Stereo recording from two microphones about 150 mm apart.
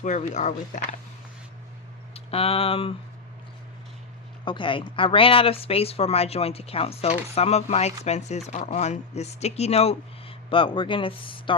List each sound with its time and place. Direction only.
0.0 s speech: 55° left (ahead or behind)
2.1 s speech: 40° left (ahead or behind)
4.4 s speech: 35° left (ahead or behind)